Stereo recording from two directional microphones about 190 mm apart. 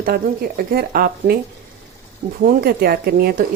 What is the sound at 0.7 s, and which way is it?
Speech, 55° right (ahead or behind).